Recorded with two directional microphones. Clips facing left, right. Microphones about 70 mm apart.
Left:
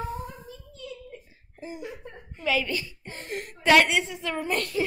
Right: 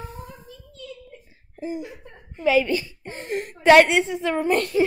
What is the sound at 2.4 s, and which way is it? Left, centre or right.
A woman's voice, right.